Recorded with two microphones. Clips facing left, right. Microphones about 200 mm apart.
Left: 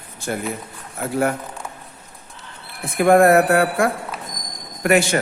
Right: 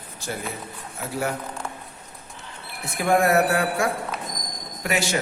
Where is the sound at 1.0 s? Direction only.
55° left (ahead or behind).